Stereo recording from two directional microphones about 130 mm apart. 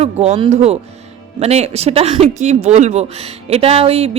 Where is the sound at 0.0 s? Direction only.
50° right (ahead or behind).